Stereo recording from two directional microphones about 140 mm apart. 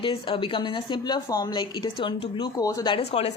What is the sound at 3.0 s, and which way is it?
Speech, 50° left (ahead or behind).